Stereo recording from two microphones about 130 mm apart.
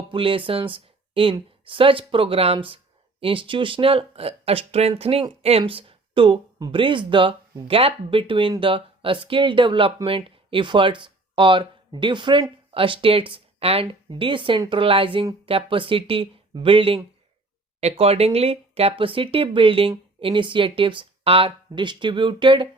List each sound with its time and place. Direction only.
0.1 s speech: 40° right (ahead or behind)